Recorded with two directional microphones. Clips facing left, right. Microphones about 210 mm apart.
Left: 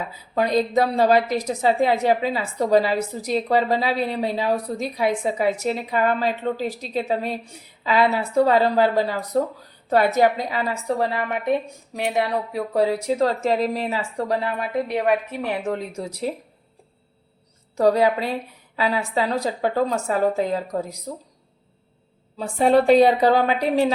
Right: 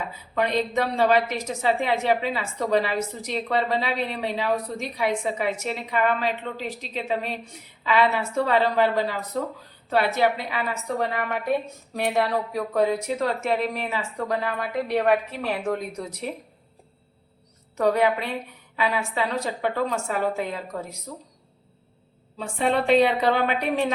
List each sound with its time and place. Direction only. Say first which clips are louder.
0.3 s a woman's voice: left 4 dB; 35° left (ahead or behind)
12.5 s a woman's voice: left 2 dB; 30° left (ahead or behind)
14.8 s a woman's voice: even; 15° left (ahead or behind)
17.7 s a woman's voice: left 3 dB; 35° left (ahead or behind)
22.5 s a woman's voice: left 5 dB; 40° left (ahead or behind)